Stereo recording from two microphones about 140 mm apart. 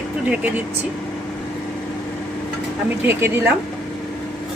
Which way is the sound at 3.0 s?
15° right (ahead or behind).